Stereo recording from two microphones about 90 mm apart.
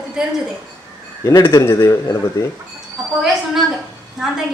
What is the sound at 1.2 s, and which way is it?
Speech, 35° left (ahead or behind).